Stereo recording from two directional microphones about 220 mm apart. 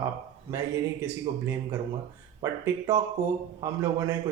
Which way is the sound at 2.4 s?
15° right (ahead or behind).